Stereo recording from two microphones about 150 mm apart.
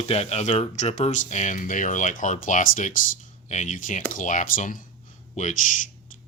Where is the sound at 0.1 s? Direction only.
45° left (ahead or behind).